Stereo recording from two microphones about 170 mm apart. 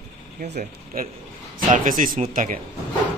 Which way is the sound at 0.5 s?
50° right (ahead or behind).